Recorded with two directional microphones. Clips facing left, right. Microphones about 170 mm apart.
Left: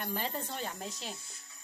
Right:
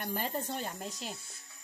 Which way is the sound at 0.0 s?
45° right (ahead or behind).